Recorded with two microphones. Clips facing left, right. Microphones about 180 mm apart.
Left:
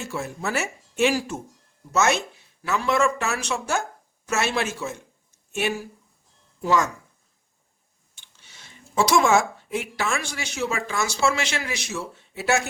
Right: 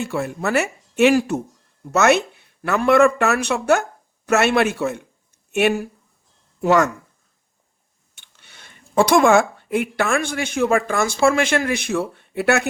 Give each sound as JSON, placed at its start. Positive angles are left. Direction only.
{"t": 0.0, "sound": "speech", "side_deg": -60}
{"t": 8.1, "sound": "speech", "side_deg": -60}